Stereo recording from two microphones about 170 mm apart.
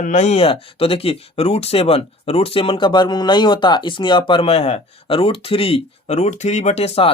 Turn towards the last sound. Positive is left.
turn(degrees=35)  # may be behind; listen again after turning